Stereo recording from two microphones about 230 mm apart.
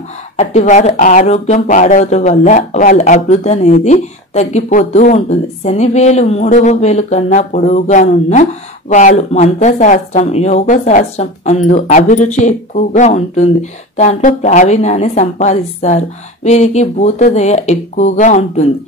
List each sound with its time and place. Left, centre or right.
0.4 s speech: left